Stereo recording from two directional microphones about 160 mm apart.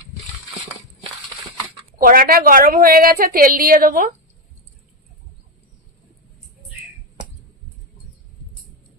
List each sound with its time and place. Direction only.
2.0 s a woman's voice: 60° right (ahead or behind)